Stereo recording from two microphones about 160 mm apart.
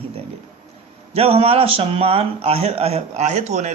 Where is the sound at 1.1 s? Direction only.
40° right (ahead or behind).